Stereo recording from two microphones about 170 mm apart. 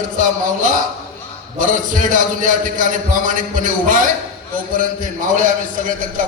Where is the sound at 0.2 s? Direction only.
50° right (ahead or behind).